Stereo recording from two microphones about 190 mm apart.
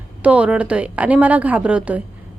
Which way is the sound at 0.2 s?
5° right (ahead or behind).